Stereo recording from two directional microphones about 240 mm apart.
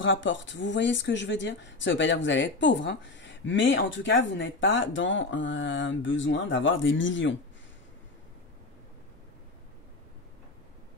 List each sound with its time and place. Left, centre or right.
0.0 s speech: left